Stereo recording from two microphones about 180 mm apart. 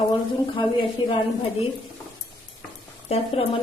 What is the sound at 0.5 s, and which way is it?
Speech, 30° left (ahead or behind).